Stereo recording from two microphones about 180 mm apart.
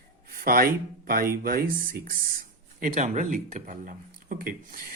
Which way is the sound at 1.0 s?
55° right (ahead or behind).